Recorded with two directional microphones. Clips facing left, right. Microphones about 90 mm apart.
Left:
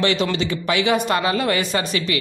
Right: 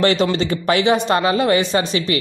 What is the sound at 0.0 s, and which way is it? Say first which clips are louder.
A woman's voice: right 4 dB; 40° right (ahead or behind).